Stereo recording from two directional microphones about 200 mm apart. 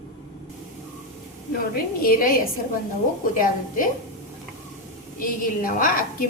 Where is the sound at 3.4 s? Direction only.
40° left (ahead or behind).